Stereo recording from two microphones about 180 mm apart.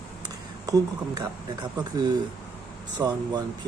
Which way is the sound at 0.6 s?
20° right (ahead or behind).